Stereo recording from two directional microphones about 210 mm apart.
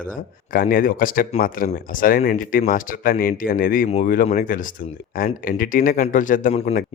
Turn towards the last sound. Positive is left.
turn(degrees=35)  # may be behind; listen again after turning